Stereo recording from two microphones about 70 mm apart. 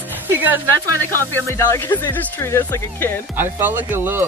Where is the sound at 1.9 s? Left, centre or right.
Left.